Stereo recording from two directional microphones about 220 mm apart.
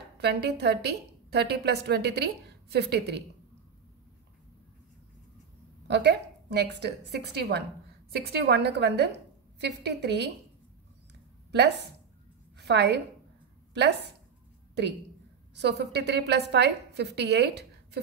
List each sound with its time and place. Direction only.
0.2 s a woman's voice: 45° right (ahead or behind)
5.9 s a woman's voice: 50° right (ahead or behind)
11.5 s a woman's voice: 50° right (ahead or behind)
15.5 s a woman's voice: 50° right (ahead or behind)